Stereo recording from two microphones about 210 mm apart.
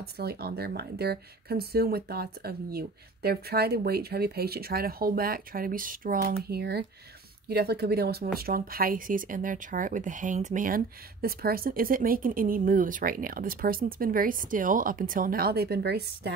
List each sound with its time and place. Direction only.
0.0 s speech: 50° right (ahead or behind)